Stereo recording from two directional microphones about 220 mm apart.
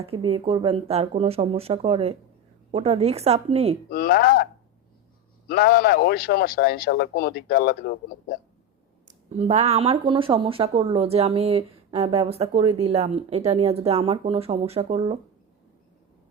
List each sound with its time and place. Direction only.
0.0 s speech: 25° right (ahead or behind)
3.8 s speech: 45° left (ahead or behind)
5.5 s speech: 40° left (ahead or behind)
9.0 s speech: 30° right (ahead or behind)